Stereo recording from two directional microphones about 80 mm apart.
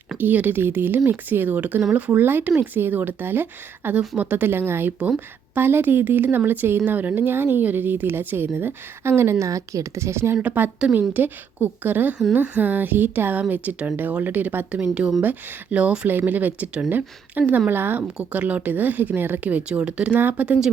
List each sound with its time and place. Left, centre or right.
0.2 s speech: right
9.5 s speech: right
10.3 s speech: right